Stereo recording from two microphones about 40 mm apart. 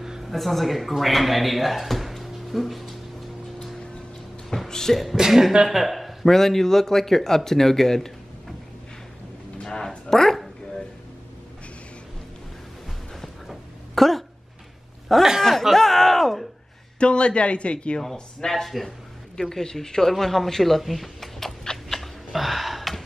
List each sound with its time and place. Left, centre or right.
0.0 s a sound: centre
0.3 s speech: centre
4.5 s speech: centre
5.1 s speech: centre
6.3 s speech: centre
9.6 s a sound: centre
13.5 s a sound: centre
15.1 s speech: centre
15.4 s music: centre
17.0 s speech: left
18.6 s speech: centre
21.8 s a sound: centre